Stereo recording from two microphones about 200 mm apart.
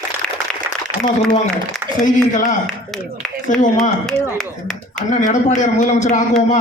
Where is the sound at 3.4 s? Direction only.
40° left (ahead or behind).